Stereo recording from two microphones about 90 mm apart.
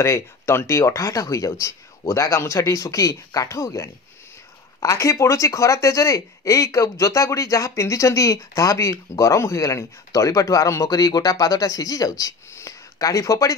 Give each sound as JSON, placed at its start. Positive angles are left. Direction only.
{"t": 0.0, "sound": "speech", "side_deg": 30}